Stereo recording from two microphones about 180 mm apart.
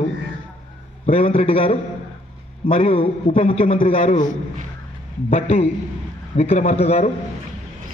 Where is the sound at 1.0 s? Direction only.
35° left (ahead or behind).